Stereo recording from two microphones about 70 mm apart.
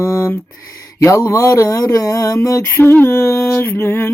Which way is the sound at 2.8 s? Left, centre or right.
Left.